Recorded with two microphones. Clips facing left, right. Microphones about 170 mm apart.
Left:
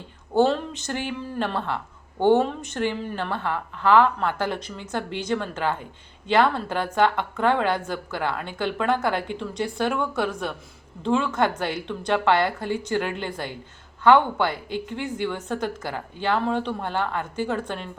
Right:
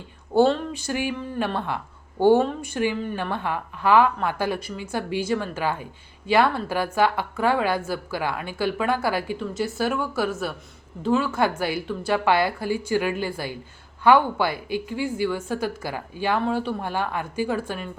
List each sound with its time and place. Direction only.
0.3 s a woman's voice: 10° right (ahead or behind)